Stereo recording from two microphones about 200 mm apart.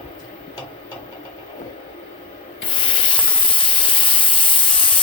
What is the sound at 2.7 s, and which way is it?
Steam, 25° left (ahead or behind).